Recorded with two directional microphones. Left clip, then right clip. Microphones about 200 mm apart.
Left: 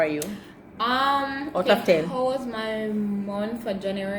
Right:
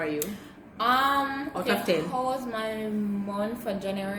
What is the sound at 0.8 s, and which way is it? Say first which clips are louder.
Speech: left 1 dB; 15° right (ahead or behind).